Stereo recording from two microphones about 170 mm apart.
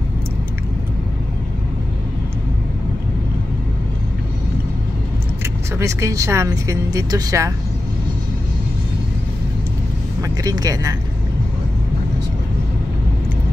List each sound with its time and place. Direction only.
5.8 s speech: 15° right (ahead or behind)
10.2 s speech: 20° right (ahead or behind)